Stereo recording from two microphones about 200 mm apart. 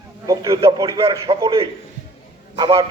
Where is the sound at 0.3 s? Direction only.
20° right (ahead or behind).